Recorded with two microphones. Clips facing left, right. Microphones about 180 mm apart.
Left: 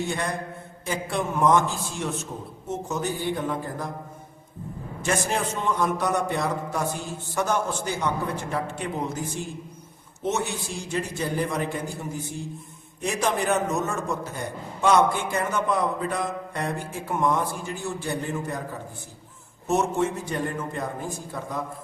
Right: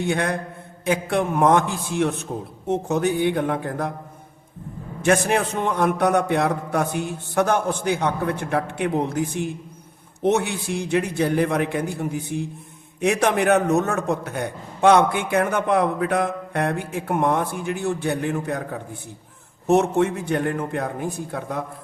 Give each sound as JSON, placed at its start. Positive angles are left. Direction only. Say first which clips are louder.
{"t": 0.0, "sound": "a man's voice", "louder": "right 5 dB", "side_deg": -60}
{"t": 5.0, "sound": "a man's voice", "louder": "right 7 dB", "side_deg": -60}